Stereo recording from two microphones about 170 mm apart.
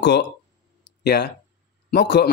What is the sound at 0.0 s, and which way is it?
Speech, 75° left (ahead or behind).